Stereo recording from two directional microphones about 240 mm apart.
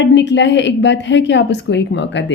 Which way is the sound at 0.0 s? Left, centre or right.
Left.